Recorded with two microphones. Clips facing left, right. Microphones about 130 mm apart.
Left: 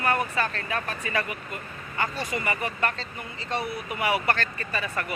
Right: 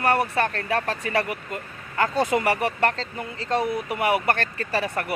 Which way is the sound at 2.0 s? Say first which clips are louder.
Right 8 dB; 85° right.